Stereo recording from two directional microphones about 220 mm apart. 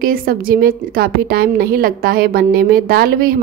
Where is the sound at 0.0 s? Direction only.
40° right (ahead or behind).